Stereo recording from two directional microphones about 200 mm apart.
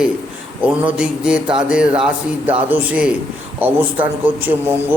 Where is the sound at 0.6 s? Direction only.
5° right (ahead or behind).